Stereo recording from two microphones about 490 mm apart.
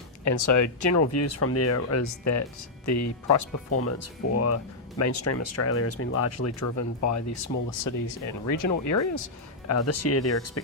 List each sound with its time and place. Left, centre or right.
0.3 s speech: left